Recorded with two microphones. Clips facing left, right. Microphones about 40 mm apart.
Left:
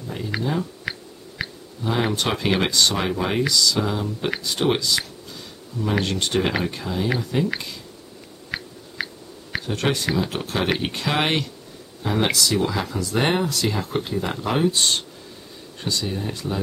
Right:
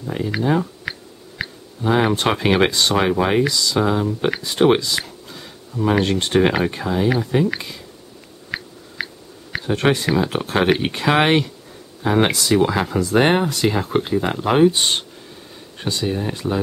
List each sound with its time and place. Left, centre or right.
0.4 s speech: right
0.9 s finger snapping: centre
1.4 s a sound: centre
1.8 s speech: centre
7.3 s speech: centre
8.5 s a sound: centre
9.7 s speech: right